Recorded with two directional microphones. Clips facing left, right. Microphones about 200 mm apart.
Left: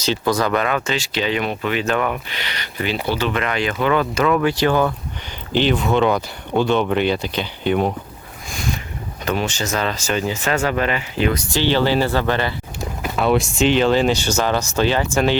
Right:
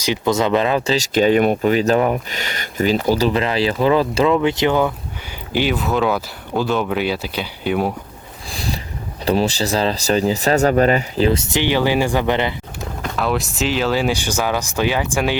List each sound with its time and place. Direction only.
0.0 s speech: 20° right (ahead or behind)
5.5 s speech: 5° right (ahead or behind)
8.4 s a sound: 35° right (ahead or behind)
9.2 s speech: 35° right (ahead or behind); by 12.5 s 20° right (ahead or behind)
13.0 s speech: centre (ahead or behind)